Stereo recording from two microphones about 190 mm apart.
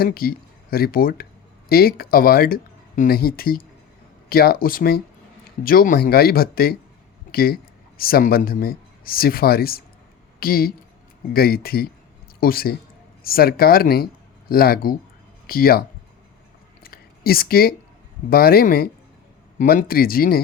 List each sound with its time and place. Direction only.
0.0 s speech: 55° left (ahead or behind)
16.8 s a sound: 50° left (ahead or behind)
18.3 s speech: 50° left (ahead or behind)